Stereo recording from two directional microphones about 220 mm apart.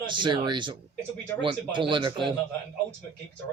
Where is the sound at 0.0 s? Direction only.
20° right (ahead or behind).